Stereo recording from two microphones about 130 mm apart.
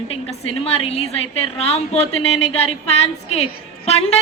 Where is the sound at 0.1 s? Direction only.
50° left (ahead or behind).